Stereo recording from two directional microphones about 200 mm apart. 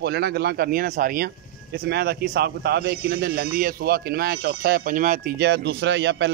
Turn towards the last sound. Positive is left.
turn(degrees=-60)  # may be behind; listen again after turning